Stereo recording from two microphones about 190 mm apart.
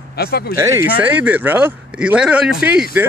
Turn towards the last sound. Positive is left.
turn(degrees=-10)  # may be behind; listen again after turning